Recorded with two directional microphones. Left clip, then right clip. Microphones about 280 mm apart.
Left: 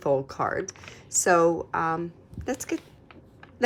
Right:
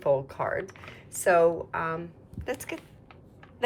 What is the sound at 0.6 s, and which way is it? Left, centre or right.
Speech, centre.